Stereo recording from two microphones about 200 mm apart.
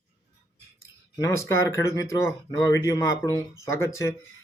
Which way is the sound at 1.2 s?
15° left (ahead or behind).